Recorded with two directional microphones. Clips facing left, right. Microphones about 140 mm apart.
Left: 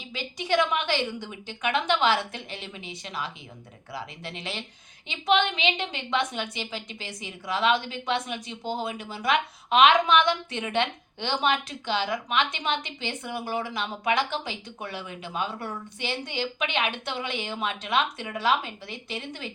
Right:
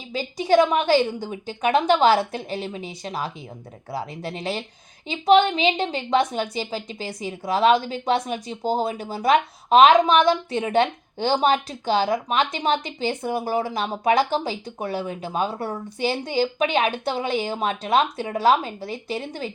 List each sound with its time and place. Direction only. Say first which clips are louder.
0.1 s a woman's voice: right 8 dB; 40° right (ahead or behind)